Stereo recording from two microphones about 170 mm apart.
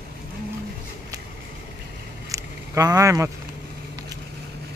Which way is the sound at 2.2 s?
20° right (ahead or behind).